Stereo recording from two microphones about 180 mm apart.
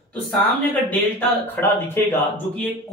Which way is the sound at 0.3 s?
10° left (ahead or behind).